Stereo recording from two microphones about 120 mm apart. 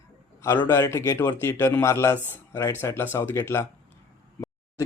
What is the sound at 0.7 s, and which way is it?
A man's voice, 25° left (ahead or behind).